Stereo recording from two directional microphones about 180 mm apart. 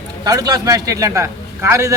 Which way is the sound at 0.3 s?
20° right (ahead or behind).